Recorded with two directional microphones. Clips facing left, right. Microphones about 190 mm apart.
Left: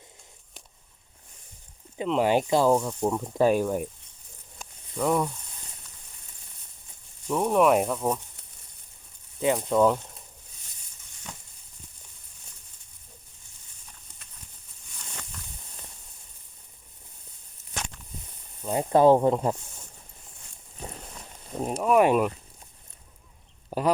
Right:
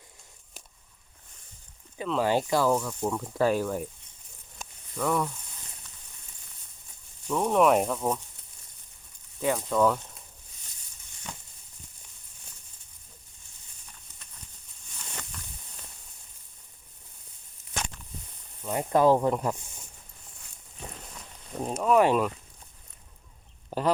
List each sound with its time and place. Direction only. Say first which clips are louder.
2.0 s speech: left 3 dB; 20° left (ahead or behind)
4.9 s speech: left 3 dB; 20° left (ahead or behind)
7.3 s speech: left 1 dB; 10° left (ahead or behind)
9.4 s speech: left 3 dB; 20° left (ahead or behind)
18.6 s speech: left 3 dB; 25° left (ahead or behind)
20.8 s a sound: left 3 dB; 40° left (ahead or behind)
21.8 s speech: left 1 dB; 10° left (ahead or behind)
23.6 s speech: left 2 dB; 10° left (ahead or behind)